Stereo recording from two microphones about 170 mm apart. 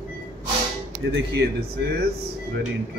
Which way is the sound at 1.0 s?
90° right.